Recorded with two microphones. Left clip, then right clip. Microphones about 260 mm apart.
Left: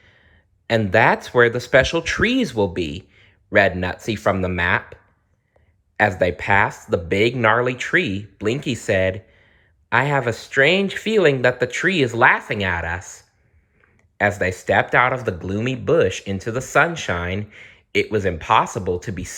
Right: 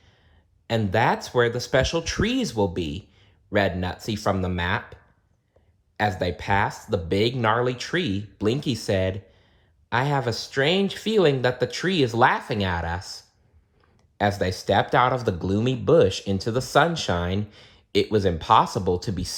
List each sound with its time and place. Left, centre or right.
0.7 s speech: centre
6.0 s speech: centre
13.9 s a sound: centre
14.7 s speech: centre